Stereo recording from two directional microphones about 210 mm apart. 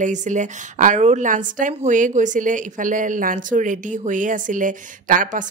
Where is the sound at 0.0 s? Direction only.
35° right (ahead or behind).